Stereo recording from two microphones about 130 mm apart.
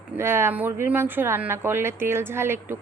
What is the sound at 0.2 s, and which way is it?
Speech, 20° right (ahead or behind).